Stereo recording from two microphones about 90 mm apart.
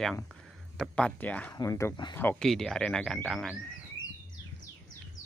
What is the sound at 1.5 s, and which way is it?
Speech, 35° left (ahead or behind).